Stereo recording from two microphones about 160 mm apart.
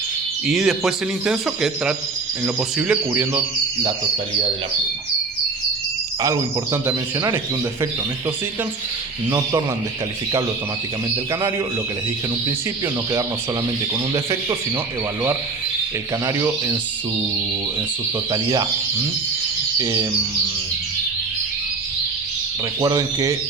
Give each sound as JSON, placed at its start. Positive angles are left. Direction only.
{"t": 0.4, "sound": "speech", "side_deg": 0}
{"t": 6.2, "sound": "a man's voice", "side_deg": -20}
{"t": 16.2, "sound": "a man's voice", "side_deg": -20}
{"t": 18.3, "sound": "a man's voice", "side_deg": -25}
{"t": 19.8, "sound": "a man's voice", "side_deg": -20}
{"t": 22.8, "sound": "a man's voice", "side_deg": -25}